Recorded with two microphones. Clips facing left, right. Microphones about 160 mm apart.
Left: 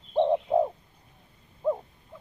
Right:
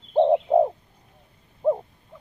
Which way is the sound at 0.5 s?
35° right (ahead or behind).